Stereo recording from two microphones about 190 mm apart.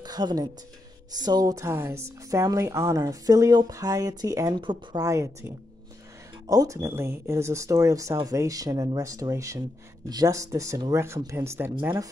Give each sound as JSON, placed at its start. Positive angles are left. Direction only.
{"t": 0.0, "sound": "a woman's voice", "side_deg": -20}
{"t": 6.5, "sound": "a woman's voice", "side_deg": -20}